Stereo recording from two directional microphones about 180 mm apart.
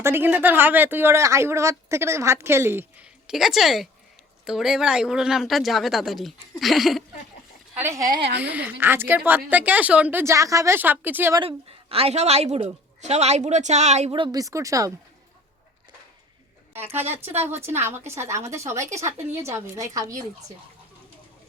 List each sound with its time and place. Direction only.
0.0 s speech: 10° right (ahead or behind)
7.8 s speech: 15° right (ahead or behind)
8.4 s speech: 10° right (ahead or behind)
11.3 s a woman's voice: 30° right (ahead or behind)
16.7 s speech: 10° right (ahead or behind)